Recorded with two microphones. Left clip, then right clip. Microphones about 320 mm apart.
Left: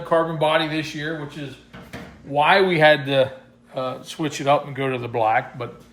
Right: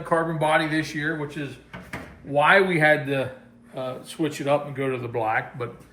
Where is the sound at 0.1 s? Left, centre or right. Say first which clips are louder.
Left 3 dB; centre.